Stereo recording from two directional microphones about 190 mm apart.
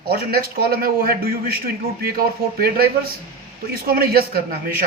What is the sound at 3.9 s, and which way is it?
Speech, 55° right (ahead or behind).